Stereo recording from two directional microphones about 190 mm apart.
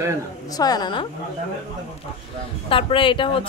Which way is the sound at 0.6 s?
20° left (ahead or behind).